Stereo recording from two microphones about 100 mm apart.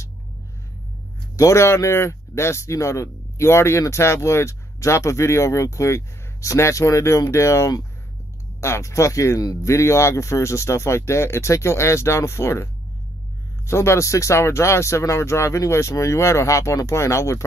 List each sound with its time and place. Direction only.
1.3 s speech: 30° left (ahead or behind)
13.7 s speech: 25° left (ahead or behind)